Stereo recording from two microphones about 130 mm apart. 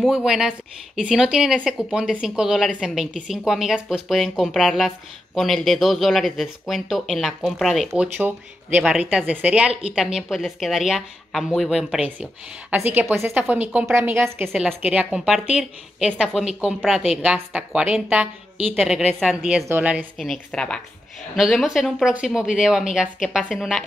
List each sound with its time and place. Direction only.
0.0 s speech: 5° right (ahead or behind)
8.2 s a woman's voice: 15° right (ahead or behind)
14.5 s speech: centre (ahead or behind)
14.8 s a woman's voice: 10° right (ahead or behind)
20.2 s a woman's voice: 5° left (ahead or behind)